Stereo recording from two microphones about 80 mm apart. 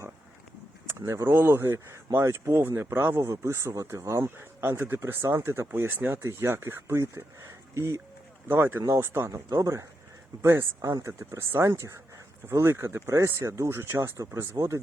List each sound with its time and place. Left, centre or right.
0.9 s speech: right
2.0 s speech: right
4.2 s speech: right
8.4 s speech: right